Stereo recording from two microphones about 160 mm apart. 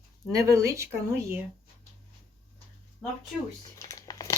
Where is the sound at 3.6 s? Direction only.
20° left (ahead or behind).